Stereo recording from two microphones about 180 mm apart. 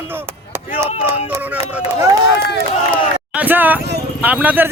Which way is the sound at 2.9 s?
10° right (ahead or behind).